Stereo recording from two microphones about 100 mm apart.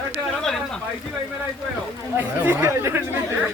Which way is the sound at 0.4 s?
5° left (ahead or behind).